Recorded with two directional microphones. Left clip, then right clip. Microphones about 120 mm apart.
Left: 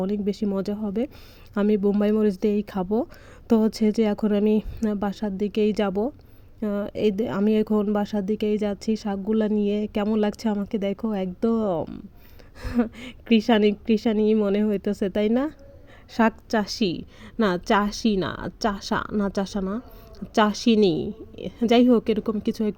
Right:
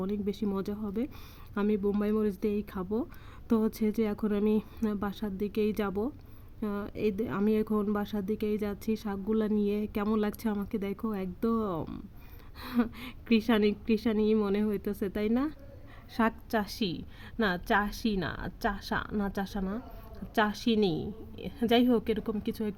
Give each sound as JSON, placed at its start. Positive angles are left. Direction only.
{"t": 0.0, "sound": "a woman's voice", "side_deg": 40}
{"t": 1.5, "sound": "a woman's voice", "side_deg": 50}